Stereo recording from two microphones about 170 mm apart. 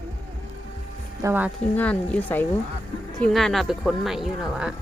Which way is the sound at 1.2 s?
15° right (ahead or behind).